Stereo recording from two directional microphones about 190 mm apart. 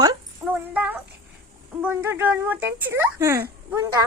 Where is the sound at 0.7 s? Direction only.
10° right (ahead or behind).